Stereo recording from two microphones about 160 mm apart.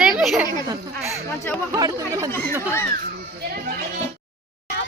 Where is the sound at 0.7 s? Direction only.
15° right (ahead or behind).